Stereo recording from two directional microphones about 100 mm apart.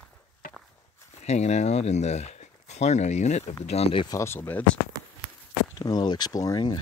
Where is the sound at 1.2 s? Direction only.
90° left.